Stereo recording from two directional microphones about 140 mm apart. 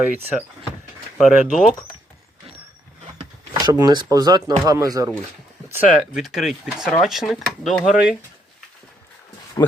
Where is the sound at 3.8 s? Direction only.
30° right (ahead or behind).